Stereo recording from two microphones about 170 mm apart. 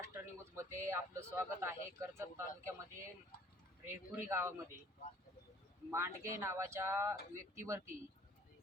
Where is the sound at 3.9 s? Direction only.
15° right (ahead or behind).